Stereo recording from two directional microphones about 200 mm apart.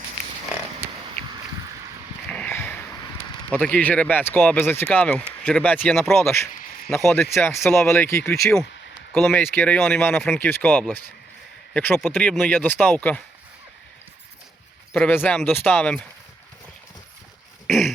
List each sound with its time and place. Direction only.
2.3 s sniff: 10° left (ahead or behind)
3.5 s speech: 5° left (ahead or behind)
7.1 s speech: 10° left (ahead or behind)
14.9 s speech: 10° left (ahead or behind)
17.7 s throat clearing: centre (ahead or behind)